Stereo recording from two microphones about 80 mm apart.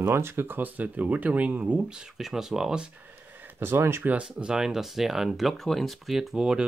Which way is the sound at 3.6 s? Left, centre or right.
Right.